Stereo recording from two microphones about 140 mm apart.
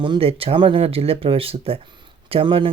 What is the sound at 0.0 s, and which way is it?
Speech, 40° right (ahead or behind).